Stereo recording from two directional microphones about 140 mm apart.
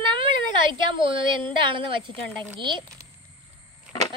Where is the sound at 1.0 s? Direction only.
35° right (ahead or behind).